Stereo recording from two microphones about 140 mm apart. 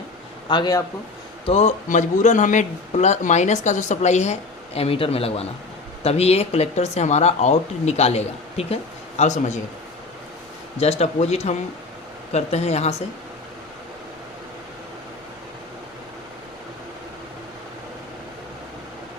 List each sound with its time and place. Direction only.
0.4 s a man's voice: 30° left (ahead or behind)
1.5 s speech: 50° left (ahead or behind)
10.8 s speech: 50° left (ahead or behind)